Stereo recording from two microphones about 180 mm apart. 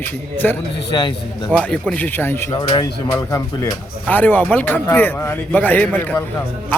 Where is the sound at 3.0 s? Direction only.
15° left (ahead or behind).